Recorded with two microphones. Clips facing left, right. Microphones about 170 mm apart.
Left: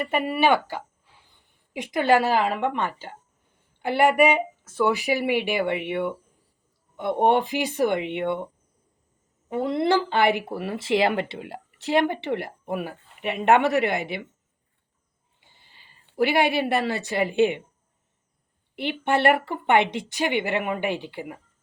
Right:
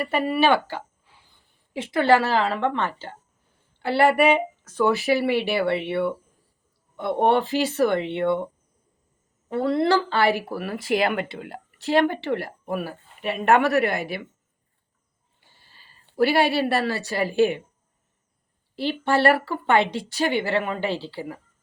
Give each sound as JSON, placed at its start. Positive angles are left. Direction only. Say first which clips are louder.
{"t": 0.0, "sound": "a woman's voice", "louder": "right 1 dB", "side_deg": 15}
{"t": 9.5, "sound": "speech", "louder": "right 1 dB", "side_deg": 15}
{"t": 15.4, "sound": "a sound", "louder": "right 1 dB", "side_deg": 20}
{"t": 16.1, "sound": "speech", "louder": "right 1 dB", "side_deg": 20}
{"t": 18.8, "sound": "speech", "louder": "right 2 dB", "side_deg": 20}